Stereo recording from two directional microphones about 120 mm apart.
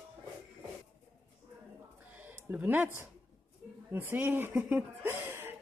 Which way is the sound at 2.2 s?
15° right (ahead or behind).